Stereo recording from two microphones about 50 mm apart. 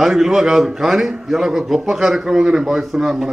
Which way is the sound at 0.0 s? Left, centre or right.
Centre.